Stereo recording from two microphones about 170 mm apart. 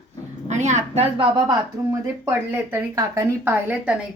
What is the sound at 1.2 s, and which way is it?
Speech, 25° right (ahead or behind).